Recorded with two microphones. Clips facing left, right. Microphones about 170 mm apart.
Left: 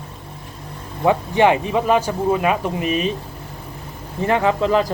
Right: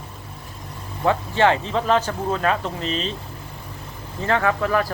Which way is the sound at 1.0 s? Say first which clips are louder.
Left 3 dB; 15° left (ahead or behind).